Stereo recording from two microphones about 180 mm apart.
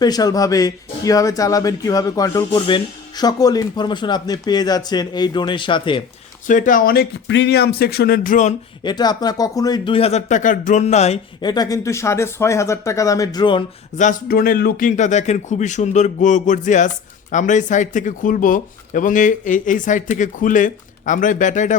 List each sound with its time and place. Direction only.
0.0 s speech: 20° left (ahead or behind)
6.5 s speech: 45° left (ahead or behind)
8.8 s speech: 25° left (ahead or behind)
11.3 s speech: 25° left (ahead or behind)
14.0 s speech: 50° left (ahead or behind)